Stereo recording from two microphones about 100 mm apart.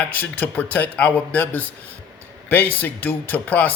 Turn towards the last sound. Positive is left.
turn(degrees=15)  # may be behind; listen again after turning